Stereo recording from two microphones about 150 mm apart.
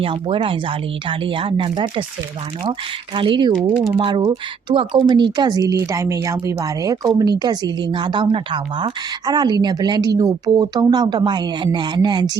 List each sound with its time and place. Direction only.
0.0 s speech: 35° right (ahead or behind)
3.2 s speech: 35° right (ahead or behind)